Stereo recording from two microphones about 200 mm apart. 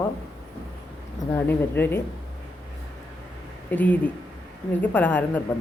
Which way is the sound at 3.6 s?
10° left (ahead or behind).